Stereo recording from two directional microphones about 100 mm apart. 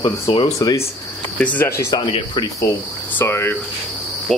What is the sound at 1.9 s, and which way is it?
Speech, 55° left (ahead or behind).